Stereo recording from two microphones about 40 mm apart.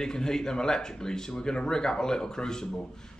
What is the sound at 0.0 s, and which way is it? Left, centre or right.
Speech, centre.